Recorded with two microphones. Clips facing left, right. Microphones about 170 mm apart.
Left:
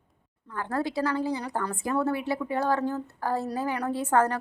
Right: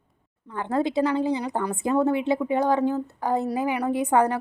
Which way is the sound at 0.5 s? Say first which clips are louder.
Right 5 dB; 20° right (ahead or behind).